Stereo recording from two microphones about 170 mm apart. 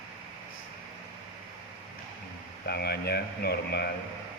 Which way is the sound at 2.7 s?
70° left (ahead or behind).